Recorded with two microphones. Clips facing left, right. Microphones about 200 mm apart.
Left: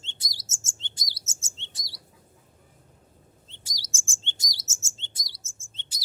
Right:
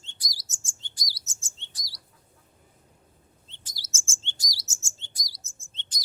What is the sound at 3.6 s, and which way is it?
Chirp, 15° left (ahead or behind).